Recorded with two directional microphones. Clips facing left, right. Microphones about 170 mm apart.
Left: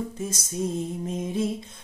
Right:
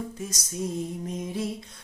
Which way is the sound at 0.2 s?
25° left (ahead or behind).